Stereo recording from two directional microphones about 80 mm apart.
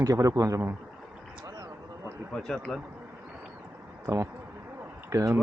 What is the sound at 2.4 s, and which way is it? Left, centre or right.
Speech, centre.